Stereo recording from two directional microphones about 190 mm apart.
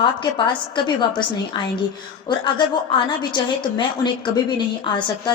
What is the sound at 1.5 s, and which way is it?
A woman's voice, 25° left (ahead or behind).